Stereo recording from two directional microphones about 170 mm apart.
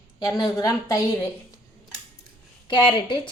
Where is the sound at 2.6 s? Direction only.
30° left (ahead or behind).